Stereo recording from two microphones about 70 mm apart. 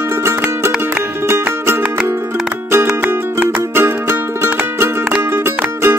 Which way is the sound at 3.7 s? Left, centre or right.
Right.